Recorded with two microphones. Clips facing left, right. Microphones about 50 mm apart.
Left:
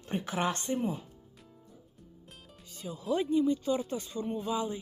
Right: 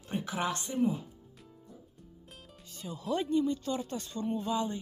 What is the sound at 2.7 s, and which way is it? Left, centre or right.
Speech, centre.